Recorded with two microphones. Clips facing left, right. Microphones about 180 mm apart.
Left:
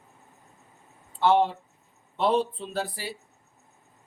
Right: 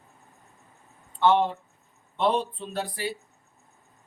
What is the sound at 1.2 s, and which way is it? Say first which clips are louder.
Speech: even; 5° left (ahead or behind).